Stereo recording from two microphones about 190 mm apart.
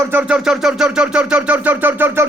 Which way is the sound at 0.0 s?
10° right (ahead or behind).